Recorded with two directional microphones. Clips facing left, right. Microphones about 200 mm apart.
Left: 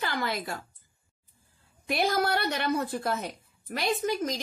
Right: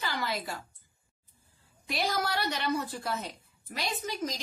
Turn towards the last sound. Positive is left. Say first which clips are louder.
# left 6 dB
turn(degrees=55)  # may be behind; listen again after turning